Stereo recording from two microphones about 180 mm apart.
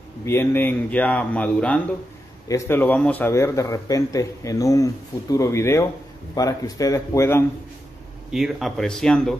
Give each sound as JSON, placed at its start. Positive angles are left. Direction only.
{"t": 0.2, "sound": "a man's voice", "side_deg": 15}
{"t": 8.3, "sound": "speech", "side_deg": 0}